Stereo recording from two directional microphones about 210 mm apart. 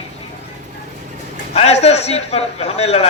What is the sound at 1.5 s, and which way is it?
A man's voice, 30° left (ahead or behind).